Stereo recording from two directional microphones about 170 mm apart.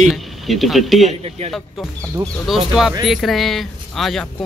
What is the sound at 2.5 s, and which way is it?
Speech, centre (ahead or behind).